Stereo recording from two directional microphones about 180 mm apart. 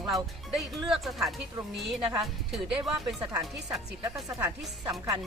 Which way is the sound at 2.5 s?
Centre (ahead or behind).